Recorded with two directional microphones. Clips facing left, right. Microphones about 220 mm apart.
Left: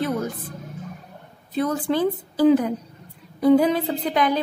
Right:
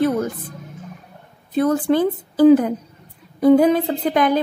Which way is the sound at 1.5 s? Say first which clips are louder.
Right 5 dB; 50° right (ahead or behind).